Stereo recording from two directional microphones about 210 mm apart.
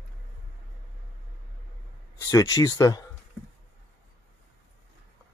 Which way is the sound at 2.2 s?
15° left (ahead or behind).